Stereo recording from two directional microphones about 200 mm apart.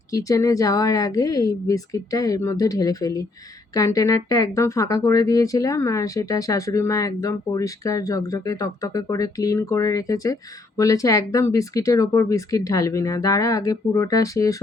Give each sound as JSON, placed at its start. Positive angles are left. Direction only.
{"t": 0.1, "sound": "speech", "side_deg": 15}